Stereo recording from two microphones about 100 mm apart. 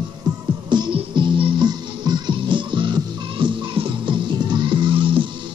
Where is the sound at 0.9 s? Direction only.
60° right (ahead or behind).